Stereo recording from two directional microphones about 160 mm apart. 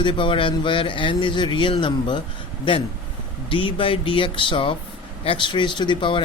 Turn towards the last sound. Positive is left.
turn(degrees=30)  # may be behind; listen again after turning